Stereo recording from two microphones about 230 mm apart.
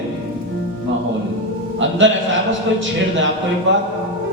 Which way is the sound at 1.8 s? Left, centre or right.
Right.